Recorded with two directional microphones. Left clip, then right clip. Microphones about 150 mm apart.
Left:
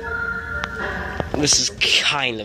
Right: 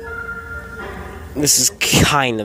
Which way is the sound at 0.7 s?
5° left (ahead or behind).